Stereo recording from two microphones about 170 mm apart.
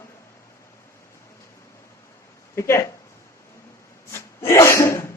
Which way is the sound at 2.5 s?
15° left (ahead or behind).